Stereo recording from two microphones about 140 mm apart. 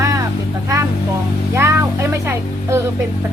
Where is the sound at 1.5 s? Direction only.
20° right (ahead or behind).